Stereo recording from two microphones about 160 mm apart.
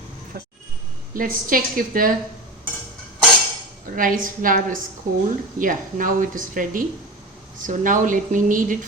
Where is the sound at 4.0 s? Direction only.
60° right (ahead or behind).